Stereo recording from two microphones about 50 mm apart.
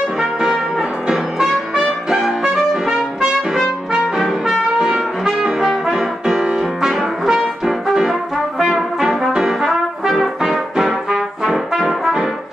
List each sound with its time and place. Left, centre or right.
0.2 s brass instrument: centre
1.0 s music: centre
2.0 s trumpet: centre
4.2 s trumpet: centre
5.4 s brass instrument: centre
5.9 s music: centre